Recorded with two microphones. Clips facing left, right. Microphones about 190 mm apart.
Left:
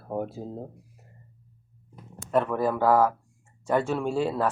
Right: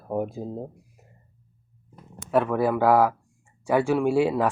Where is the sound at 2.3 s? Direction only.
10° right (ahead or behind).